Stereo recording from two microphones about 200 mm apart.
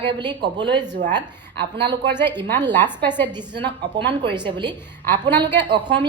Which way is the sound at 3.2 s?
20° right (ahead or behind).